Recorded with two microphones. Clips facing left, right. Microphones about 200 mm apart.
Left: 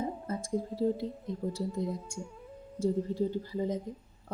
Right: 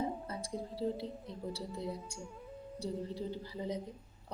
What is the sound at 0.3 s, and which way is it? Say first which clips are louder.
A woman's voice: left 7 dB; 50° left (ahead or behind).